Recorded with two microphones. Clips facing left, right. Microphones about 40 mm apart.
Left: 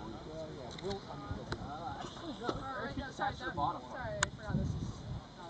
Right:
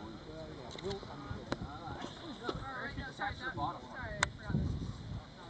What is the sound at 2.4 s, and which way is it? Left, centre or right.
Speech, centre.